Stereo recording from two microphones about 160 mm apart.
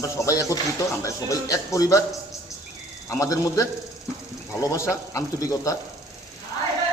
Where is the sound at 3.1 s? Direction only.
20° left (ahead or behind).